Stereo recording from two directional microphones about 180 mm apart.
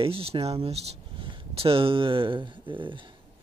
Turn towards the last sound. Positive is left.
turn(degrees=-30)  # may be behind; listen again after turning